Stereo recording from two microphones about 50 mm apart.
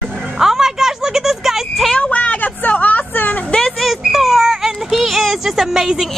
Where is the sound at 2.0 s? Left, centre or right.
Left.